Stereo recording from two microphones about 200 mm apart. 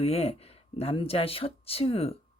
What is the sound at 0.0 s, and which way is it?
Speech, 30° left (ahead or behind).